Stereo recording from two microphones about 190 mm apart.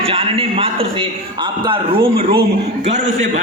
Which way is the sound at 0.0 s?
30° right (ahead or behind).